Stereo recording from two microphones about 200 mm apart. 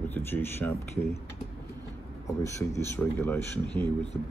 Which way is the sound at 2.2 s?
15° left (ahead or behind).